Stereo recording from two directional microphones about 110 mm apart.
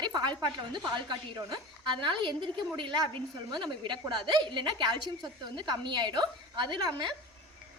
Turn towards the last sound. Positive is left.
turn(degrees=-45)  # may be behind; listen again after turning